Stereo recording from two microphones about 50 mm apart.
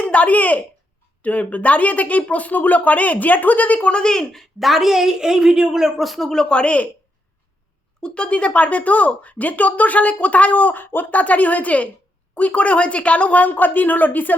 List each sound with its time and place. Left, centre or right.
0.0 s speech: left; by 5.9 s centre
6.0 s speech: centre
6.5 s speech: left
8.0 s speech: left